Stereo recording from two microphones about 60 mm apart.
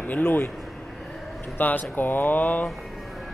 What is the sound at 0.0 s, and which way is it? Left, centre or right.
Speech, left.